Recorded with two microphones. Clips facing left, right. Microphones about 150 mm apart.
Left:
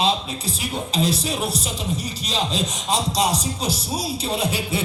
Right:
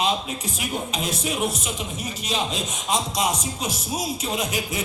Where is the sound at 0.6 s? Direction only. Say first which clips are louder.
Left 5 dB; 35° left (ahead or behind).